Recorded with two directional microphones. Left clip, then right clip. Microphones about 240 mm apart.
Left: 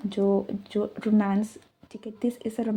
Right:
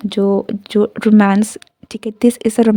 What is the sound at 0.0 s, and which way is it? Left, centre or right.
Speech, right.